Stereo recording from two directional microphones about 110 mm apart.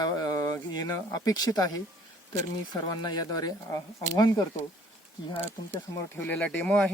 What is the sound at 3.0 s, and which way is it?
Speech, 40° left (ahead or behind).